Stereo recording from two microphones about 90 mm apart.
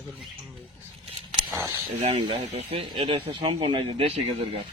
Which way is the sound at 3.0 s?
70° right (ahead or behind).